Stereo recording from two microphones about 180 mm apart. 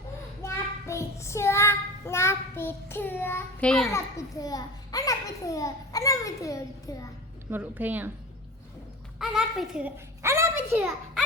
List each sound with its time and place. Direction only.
0.4 s child singing: 15° left (ahead or behind)
3.9 s a child's voice: 20° left (ahead or behind)
7.5 s a woman's voice: 10° right (ahead or behind)
9.1 s a child's voice: 5° right (ahead or behind)